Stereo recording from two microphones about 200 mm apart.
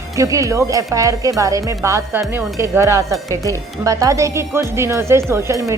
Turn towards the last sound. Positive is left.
turn(degrees=-15)  # may be behind; listen again after turning